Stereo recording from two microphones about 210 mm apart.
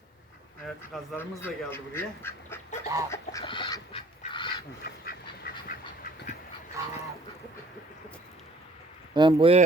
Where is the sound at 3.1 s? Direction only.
20° left (ahead or behind).